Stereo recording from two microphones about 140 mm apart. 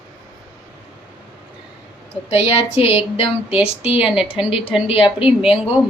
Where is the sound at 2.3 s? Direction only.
45° left (ahead or behind).